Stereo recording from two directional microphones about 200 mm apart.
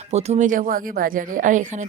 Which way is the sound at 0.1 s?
35° right (ahead or behind).